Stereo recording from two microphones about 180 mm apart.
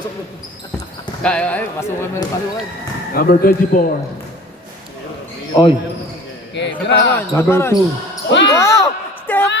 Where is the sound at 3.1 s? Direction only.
55° left (ahead or behind).